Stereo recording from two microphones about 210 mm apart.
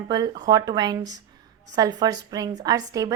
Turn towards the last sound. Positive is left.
turn(degrees=-15)  # may be behind; listen again after turning